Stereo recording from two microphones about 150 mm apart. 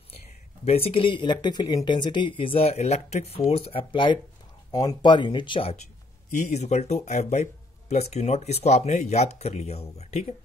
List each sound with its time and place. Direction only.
0.7 s speech: 40° left (ahead or behind)
6.3 s speech: 50° left (ahead or behind)